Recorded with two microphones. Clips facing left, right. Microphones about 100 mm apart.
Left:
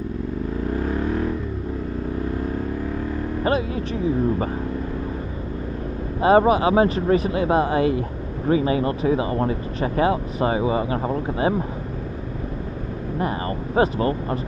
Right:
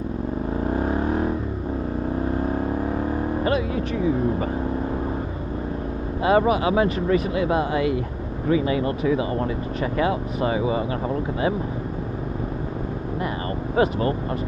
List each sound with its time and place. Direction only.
0.7 s vehicle: 35° right (ahead or behind)
3.4 s speech: 35° left (ahead or behind)
6.2 s speech: 30° left (ahead or behind)
13.7 s speech: 30° left (ahead or behind)